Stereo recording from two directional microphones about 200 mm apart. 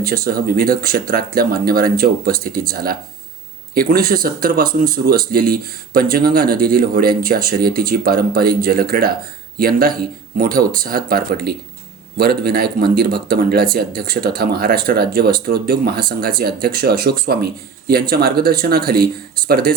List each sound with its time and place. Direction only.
0.0 s speech: 50° right (ahead or behind)